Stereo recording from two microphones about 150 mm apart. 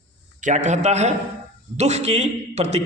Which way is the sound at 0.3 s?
55° right (ahead or behind).